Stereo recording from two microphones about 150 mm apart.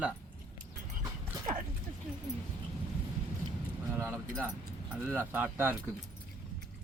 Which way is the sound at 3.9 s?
15° right (ahead or behind).